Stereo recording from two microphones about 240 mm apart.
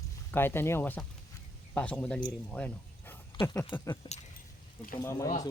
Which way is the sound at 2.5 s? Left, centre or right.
Centre.